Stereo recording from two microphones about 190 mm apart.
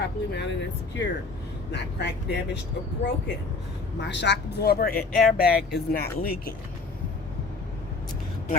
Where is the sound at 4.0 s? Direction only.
65° left (ahead or behind); by 6.5 s 50° left (ahead or behind).